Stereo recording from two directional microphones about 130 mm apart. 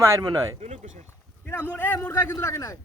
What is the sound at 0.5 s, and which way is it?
Speech, 65° right (ahead or behind).